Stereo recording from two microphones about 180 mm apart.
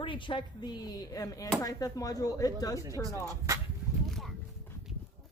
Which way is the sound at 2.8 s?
15° right (ahead or behind).